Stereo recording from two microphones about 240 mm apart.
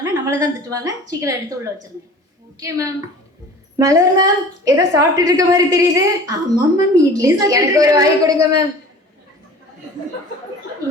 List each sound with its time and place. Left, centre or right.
0.0 s a woman's voice: centre